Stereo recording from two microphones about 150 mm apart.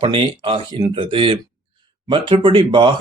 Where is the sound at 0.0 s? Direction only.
35° right (ahead or behind).